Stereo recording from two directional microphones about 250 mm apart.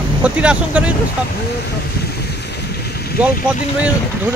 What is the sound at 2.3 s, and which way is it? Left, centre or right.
Boat, left.